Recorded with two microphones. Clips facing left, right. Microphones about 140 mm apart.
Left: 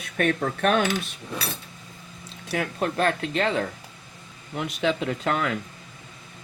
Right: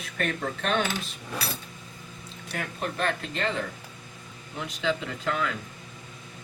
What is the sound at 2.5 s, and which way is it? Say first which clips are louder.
Speech: left 6 dB; 65° left (ahead or behind).